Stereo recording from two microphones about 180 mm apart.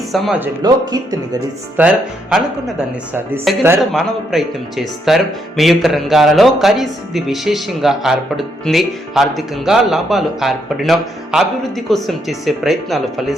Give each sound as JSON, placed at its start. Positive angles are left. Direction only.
{"t": 0.1, "sound": "speech", "side_deg": 0}
{"t": 0.6, "sound": "speech", "side_deg": -20}
{"t": 1.8, "sound": "speech", "side_deg": -10}
{"t": 3.8, "sound": "speech", "side_deg": 0}